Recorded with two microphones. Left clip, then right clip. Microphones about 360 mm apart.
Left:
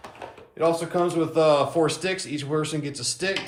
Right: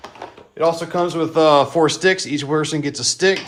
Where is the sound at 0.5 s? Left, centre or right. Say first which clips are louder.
Right 5 dB; right.